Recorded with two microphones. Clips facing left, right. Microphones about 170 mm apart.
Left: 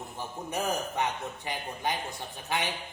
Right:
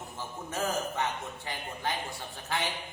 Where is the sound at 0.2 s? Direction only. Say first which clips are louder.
Left 1 dB; 15° left (ahead or behind).